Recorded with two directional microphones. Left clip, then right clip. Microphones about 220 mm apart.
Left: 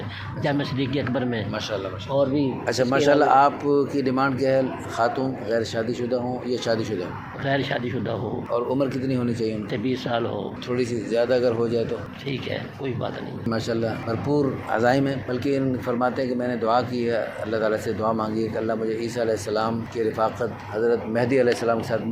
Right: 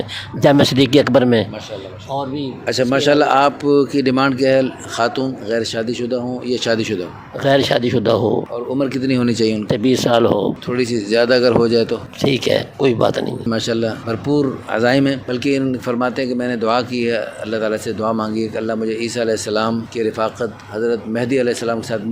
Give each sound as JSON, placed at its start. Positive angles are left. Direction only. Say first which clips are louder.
{"t": 0.4, "sound": "speech", "louder": "right 13 dB", "side_deg": -55}
{"t": 2.1, "sound": "a man's voice", "louder": "left 1 dB", "side_deg": -40}
{"t": 8.7, "sound": "a man's voice", "louder": "right 6 dB", "side_deg": -40}
{"t": 10.7, "sound": "a man's voice", "louder": "right 3 dB", "side_deg": -45}
{"t": 21.2, "sound": "speech", "louder": "right 3 dB", "side_deg": -75}